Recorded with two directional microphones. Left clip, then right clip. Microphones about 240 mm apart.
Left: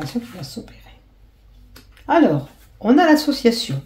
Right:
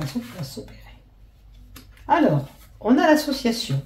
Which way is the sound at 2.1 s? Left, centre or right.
Left.